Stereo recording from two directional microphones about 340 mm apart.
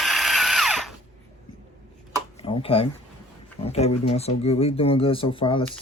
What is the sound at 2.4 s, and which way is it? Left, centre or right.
Speech, centre.